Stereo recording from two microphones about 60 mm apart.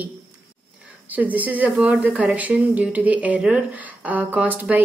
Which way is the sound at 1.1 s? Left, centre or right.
Right.